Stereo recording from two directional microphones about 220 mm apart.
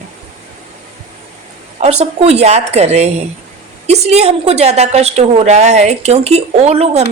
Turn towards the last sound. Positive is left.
turn(degrees=-30)  # may be behind; listen again after turning